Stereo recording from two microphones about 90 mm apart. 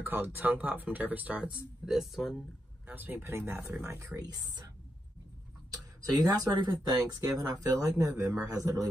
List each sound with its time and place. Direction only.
0.0 s speech: 20° right (ahead or behind)
1.9 s speech: centre (ahead or behind)
2.9 s speech: 20° right (ahead or behind)
5.7 s speech: 40° right (ahead or behind)